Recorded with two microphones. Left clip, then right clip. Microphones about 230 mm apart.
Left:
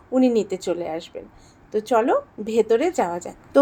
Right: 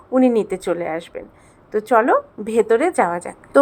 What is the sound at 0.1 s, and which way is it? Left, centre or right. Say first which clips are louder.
A woman's voice: right 3 dB; centre.